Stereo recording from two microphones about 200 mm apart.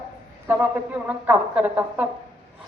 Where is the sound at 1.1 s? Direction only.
10° right (ahead or behind).